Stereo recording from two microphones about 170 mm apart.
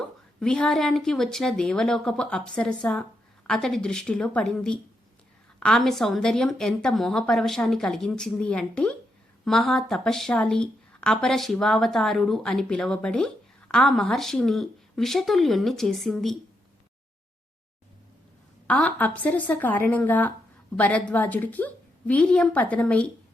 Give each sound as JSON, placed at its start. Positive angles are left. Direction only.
{"t": 0.3, "sound": "speech", "side_deg": 5}
{"t": 18.7, "sound": "a woman's voice", "side_deg": 10}